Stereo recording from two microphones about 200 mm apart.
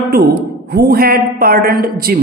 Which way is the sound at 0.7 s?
50° right (ahead or behind).